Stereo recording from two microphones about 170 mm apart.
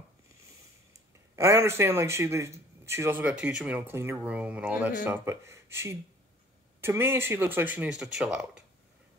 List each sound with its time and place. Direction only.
1.3 s speech: 15° right (ahead or behind)